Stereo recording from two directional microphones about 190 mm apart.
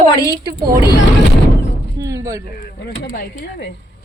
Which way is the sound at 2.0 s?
15° right (ahead or behind).